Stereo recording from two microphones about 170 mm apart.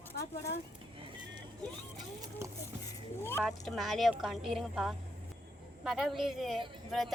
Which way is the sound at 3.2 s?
15° left (ahead or behind).